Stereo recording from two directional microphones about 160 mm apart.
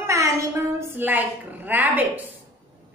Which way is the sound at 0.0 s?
20° right (ahead or behind).